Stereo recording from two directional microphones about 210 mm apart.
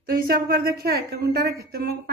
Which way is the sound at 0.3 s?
45° right (ahead or behind).